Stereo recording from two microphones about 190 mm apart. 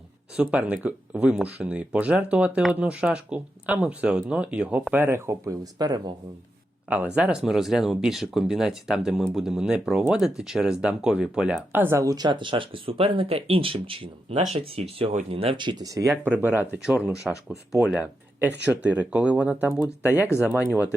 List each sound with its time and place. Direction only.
0.3 s speech: 5° right (ahead or behind)
7.2 s speech: 5° right (ahead or behind)